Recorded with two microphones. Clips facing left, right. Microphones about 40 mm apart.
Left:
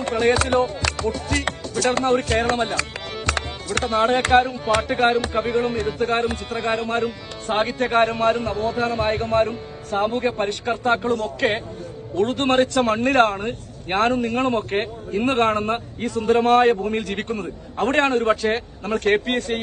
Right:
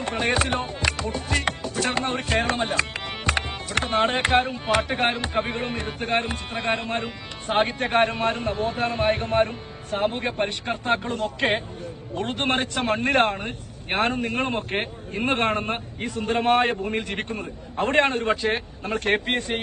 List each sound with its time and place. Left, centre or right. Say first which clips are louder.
0.0 s a man's voice: left 4 dB; centre
11.1 s a man's voice: left 4 dB; right
12.2 s a man's voice: left 6 dB; centre
14.1 s a man's voice: left 5 dB; right